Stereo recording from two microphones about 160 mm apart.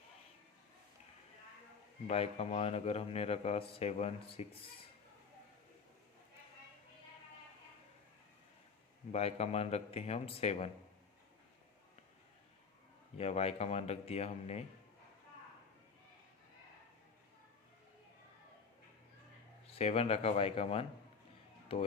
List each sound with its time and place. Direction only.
2.0 s speech: 40° left (ahead or behind)
9.1 s speech: 40° left (ahead or behind)
13.1 s speech: 40° left (ahead or behind)
19.6 s speech: 40° left (ahead or behind)